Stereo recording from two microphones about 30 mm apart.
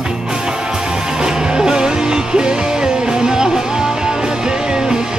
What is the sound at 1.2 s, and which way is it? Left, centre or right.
Music, right.